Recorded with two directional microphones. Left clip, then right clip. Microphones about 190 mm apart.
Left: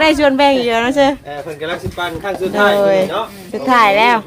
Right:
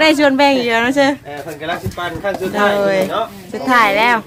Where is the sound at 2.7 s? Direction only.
5° left (ahead or behind).